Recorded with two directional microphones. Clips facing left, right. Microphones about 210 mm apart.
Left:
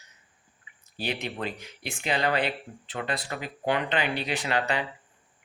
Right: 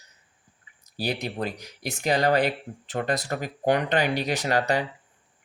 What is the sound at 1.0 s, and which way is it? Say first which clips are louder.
Speech: right 3 dB; 40° right (ahead or behind).